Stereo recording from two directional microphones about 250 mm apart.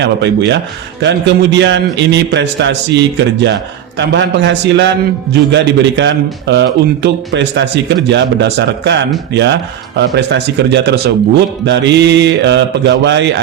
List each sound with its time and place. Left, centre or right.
0.0 s speech: right